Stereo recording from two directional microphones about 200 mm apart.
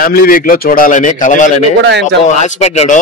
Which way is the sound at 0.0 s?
45° left (ahead or behind).